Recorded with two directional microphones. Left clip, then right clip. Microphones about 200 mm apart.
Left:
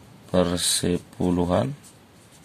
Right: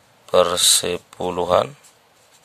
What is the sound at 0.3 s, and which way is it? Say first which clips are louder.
Speech: right 8 dB; 40° right (ahead or behind).